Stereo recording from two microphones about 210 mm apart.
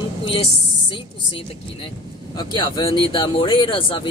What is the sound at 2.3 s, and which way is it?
Speech, 20° left (ahead or behind).